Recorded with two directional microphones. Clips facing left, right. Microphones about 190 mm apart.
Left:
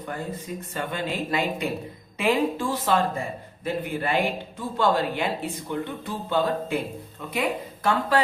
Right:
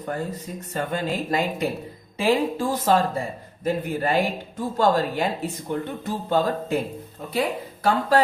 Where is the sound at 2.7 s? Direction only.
40° right (ahead or behind).